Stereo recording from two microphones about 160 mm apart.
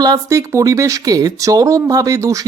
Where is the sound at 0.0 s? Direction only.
20° right (ahead or behind).